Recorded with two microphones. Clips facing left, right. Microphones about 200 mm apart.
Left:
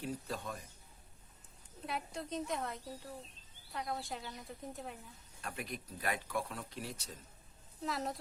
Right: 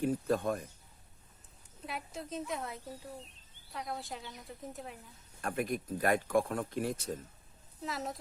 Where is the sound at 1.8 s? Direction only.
Centre (ahead or behind).